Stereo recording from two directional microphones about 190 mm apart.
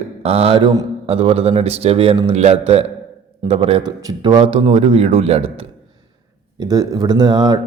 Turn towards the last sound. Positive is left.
turn(degrees=-20)  # may be behind; listen again after turning